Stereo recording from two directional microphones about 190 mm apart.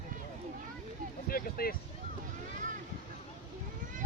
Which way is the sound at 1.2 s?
50° left (ahead or behind).